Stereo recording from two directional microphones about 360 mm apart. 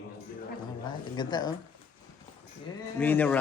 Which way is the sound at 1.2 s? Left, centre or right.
Centre.